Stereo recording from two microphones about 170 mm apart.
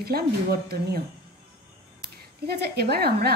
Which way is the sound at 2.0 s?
70° right (ahead or behind).